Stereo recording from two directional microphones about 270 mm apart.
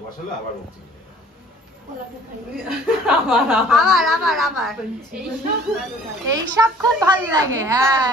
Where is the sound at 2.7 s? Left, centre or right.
Centre.